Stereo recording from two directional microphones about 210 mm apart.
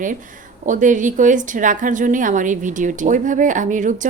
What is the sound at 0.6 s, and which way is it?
A woman's voice, 35° right (ahead or behind).